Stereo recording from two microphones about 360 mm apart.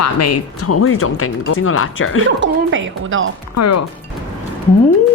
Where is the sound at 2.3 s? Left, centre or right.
Right.